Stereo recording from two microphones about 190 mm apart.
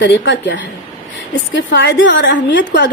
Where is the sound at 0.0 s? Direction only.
75° left (ahead or behind).